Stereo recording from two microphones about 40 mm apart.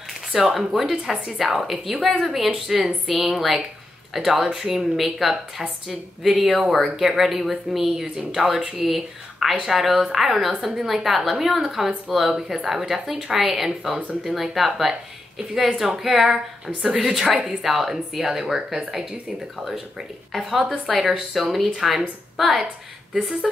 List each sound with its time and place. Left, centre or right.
0.3 s speech: centre
1.6 s speech: centre